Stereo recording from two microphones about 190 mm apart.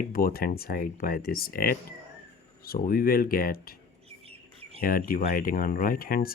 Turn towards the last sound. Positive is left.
turn(degrees=50)  # may be behind; listen again after turning